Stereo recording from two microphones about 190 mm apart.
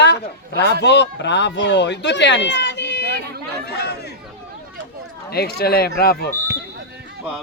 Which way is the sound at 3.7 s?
60° left (ahead or behind).